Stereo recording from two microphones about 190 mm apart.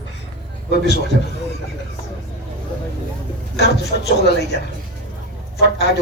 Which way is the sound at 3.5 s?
60° left (ahead or behind).